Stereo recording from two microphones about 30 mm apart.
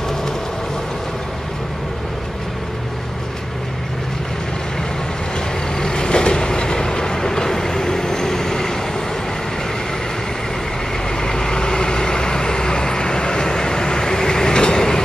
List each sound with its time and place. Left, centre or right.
5.8 s vehicle: left
11.1 s vehicle: left